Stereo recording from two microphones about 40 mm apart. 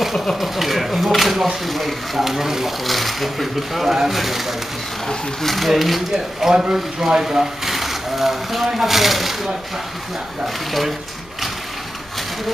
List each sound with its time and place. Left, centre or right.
0.4 s speech: centre
5.0 s speech: centre
6.1 s speech: centre